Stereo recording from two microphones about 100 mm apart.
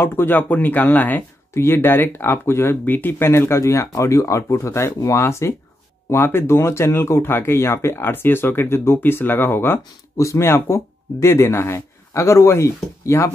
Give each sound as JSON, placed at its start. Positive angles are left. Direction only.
{"t": 0.0, "sound": "speech", "side_deg": 20}